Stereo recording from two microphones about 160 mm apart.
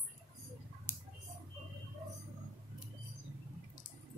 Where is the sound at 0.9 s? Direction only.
15° left (ahead or behind).